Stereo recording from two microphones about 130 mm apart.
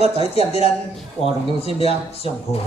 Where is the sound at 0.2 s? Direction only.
50° left (ahead or behind).